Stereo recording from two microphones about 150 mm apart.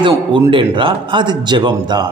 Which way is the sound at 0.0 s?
35° right (ahead or behind).